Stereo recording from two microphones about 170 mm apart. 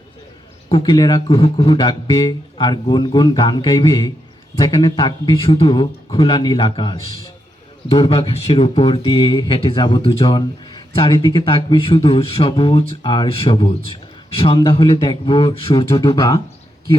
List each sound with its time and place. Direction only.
0.7 s speech: 25° left (ahead or behind)